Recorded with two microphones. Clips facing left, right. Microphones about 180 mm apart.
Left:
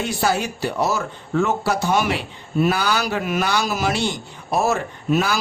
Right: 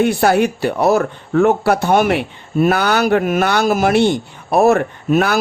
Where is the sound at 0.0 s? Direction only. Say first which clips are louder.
Right 8 dB; 60° right (ahead or behind).